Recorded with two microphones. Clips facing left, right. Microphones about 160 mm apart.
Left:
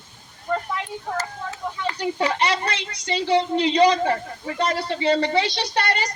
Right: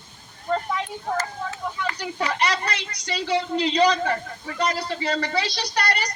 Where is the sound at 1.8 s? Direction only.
25° left (ahead or behind).